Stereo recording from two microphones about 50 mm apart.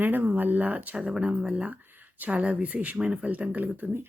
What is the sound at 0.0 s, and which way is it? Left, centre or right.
Speech, right.